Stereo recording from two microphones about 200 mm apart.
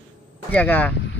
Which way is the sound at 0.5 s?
10° left (ahead or behind).